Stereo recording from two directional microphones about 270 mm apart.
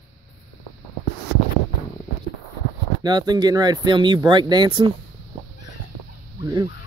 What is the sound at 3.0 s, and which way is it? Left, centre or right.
Speech, centre.